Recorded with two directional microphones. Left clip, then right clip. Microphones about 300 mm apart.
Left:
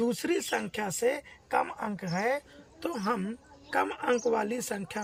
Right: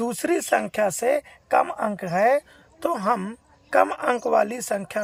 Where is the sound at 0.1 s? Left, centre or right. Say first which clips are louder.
Right 8 dB; centre.